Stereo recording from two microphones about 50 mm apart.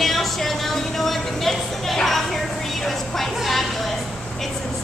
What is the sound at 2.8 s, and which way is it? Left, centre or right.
Music, centre.